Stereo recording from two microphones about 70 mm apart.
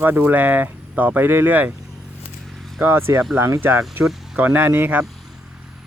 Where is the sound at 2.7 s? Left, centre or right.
Right.